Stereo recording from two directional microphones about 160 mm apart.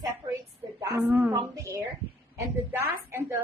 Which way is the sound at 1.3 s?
20° right (ahead or behind).